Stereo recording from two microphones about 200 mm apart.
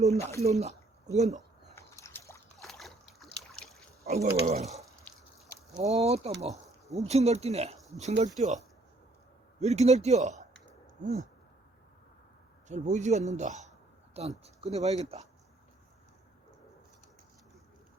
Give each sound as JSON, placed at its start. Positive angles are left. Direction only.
{"t": 0.0, "sound": "speech", "side_deg": -35}
{"t": 1.7, "sound": "a sound", "side_deg": 15}
{"t": 2.6, "sound": "boat", "side_deg": 0}
{"t": 4.0, "sound": "speech", "side_deg": -30}
{"t": 9.6, "sound": "speech", "side_deg": -35}
{"t": 12.6, "sound": "a man's voice", "side_deg": -35}